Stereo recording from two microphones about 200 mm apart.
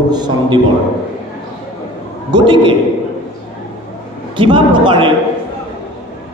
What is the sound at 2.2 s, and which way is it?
Speech, 25° right (ahead or behind).